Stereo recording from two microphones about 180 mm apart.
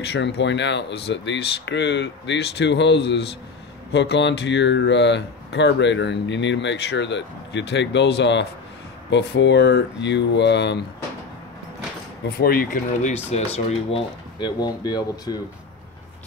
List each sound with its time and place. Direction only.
0.0 s speech: 65° left (ahead or behind)
12.4 s speech: 55° left (ahead or behind)
13.3 s speech: 35° left (ahead or behind)